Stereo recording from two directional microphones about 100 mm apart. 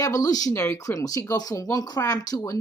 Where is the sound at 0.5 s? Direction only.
25° left (ahead or behind).